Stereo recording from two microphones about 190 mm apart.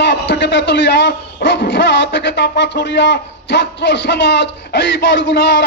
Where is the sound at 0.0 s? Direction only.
70° left (ahead or behind).